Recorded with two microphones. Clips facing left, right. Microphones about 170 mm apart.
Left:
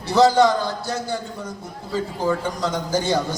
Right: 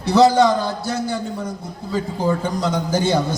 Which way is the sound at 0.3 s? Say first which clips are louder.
Right 1 dB; 20° right (ahead or behind).